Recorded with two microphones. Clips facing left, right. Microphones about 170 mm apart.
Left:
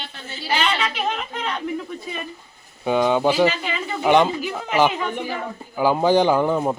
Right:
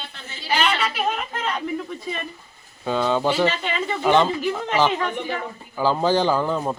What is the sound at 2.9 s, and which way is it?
A man's voice, 15° left (ahead or behind).